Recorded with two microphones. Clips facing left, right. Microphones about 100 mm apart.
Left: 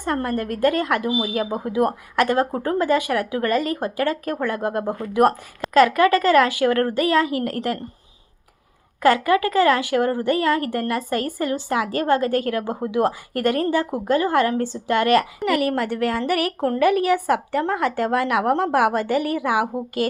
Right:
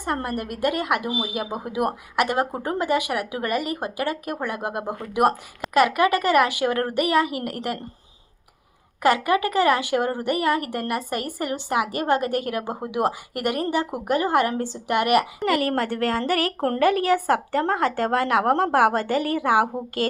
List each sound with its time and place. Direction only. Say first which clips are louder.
0.0 s a woman's voice: left 3 dB; 20° right (ahead or behind)
9.0 s a woman's voice: left 3 dB; 20° right (ahead or behind)
15.4 s a woman's voice: left 1 dB; 35° right (ahead or behind)
16.6 s speech: left 2 dB; 45° right (ahead or behind)
17.0 s a woman's voice: left 1 dB; 35° right (ahead or behind)